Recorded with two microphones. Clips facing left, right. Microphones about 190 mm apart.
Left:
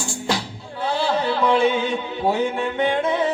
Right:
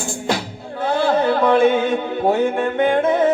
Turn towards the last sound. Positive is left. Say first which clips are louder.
# right 5 dB
turn(degrees=-50)  # may be behind; listen again after turning